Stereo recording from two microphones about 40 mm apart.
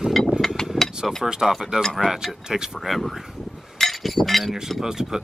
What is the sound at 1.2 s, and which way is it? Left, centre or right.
Speech, centre.